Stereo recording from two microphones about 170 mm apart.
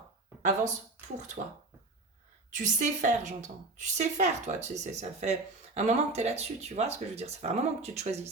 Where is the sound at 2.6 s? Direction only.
45° right (ahead or behind).